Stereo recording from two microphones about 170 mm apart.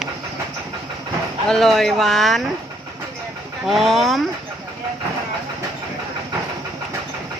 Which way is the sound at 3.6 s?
Centre (ahead or behind).